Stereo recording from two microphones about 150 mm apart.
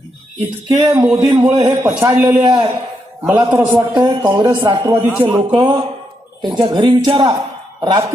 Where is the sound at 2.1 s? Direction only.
15° right (ahead or behind).